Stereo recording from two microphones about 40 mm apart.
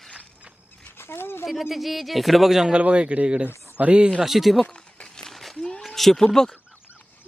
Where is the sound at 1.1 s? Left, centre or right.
Left.